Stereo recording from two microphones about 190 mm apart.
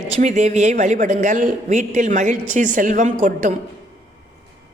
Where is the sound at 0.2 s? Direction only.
40° right (ahead or behind).